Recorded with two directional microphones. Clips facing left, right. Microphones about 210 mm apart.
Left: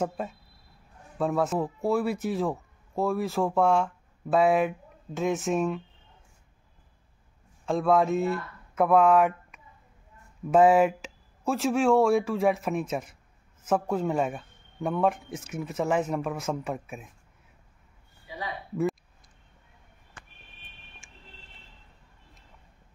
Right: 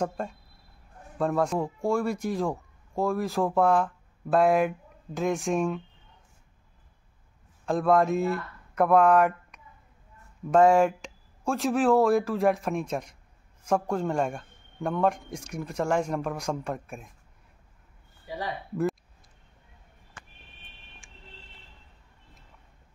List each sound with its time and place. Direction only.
0.0 s a man's voice: 5° left (ahead or behind)
7.6 s a man's voice: centre (ahead or behind)
21.0 s music: centre (ahead or behind)